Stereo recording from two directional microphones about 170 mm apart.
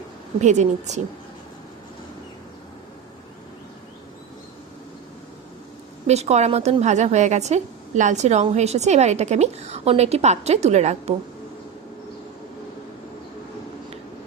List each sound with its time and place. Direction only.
0.3 s speech: 45° right (ahead or behind)
6.1 s a woman's voice: 40° right (ahead or behind)